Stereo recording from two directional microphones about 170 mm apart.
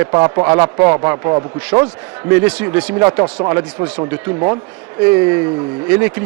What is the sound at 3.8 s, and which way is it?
Speech, 10° right (ahead or behind).